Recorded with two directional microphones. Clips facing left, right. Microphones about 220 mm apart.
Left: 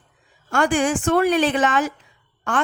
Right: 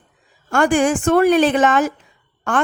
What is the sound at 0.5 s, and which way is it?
Speech, 45° right (ahead or behind).